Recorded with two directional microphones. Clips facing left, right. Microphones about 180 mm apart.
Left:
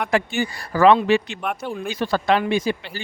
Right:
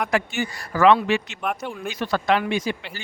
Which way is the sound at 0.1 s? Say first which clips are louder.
Left 3 dB; 35° left (ahead or behind).